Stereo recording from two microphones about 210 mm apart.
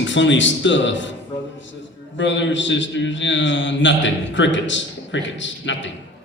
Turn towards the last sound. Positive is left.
turn(degrees=60)  # may be behind; listen again after turning